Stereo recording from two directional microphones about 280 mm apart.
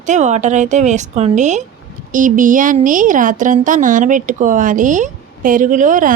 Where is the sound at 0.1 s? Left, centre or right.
Right.